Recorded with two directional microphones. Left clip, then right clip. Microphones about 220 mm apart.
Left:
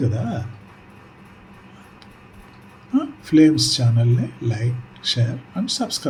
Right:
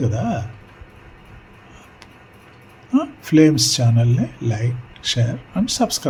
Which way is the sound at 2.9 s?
15° right (ahead or behind).